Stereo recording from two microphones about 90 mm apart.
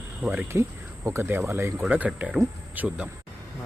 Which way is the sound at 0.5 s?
30° right (ahead or behind).